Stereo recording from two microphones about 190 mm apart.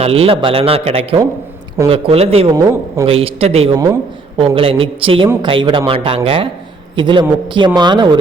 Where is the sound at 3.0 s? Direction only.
30° right (ahead or behind).